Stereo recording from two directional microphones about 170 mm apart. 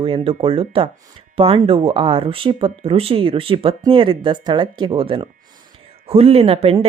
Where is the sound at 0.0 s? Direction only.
35° right (ahead or behind).